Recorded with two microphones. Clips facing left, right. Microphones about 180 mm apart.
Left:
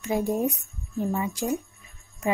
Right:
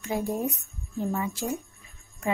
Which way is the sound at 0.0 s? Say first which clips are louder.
Left 4 dB; 15° left (ahead or behind).